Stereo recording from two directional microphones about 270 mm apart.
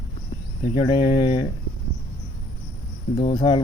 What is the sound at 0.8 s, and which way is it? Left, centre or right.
Speech, centre.